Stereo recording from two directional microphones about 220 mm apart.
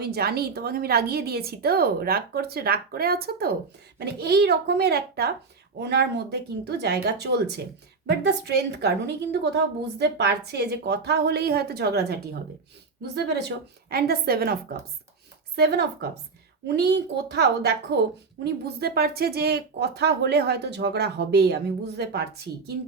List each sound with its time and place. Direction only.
0.0 s a woman's voice: 45° right (ahead or behind)